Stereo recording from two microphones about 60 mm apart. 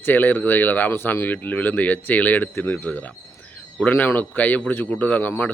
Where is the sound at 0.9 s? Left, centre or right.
Left.